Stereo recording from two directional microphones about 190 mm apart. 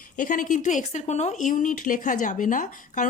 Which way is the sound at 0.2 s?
45° left (ahead or behind).